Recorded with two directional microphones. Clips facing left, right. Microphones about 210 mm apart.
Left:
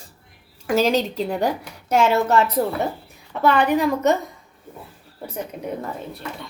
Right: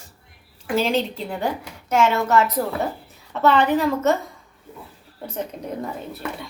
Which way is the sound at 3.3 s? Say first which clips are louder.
Even; 10° left (ahead or behind).